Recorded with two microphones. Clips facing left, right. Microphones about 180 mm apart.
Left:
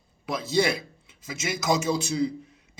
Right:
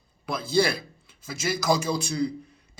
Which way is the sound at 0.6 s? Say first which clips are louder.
Left 1 dB; 25° left (ahead or behind).